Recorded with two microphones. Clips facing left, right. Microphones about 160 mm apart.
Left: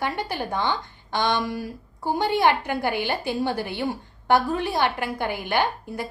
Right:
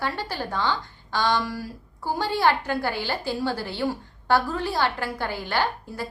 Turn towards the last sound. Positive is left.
turn(degrees=15)  # may be behind; listen again after turning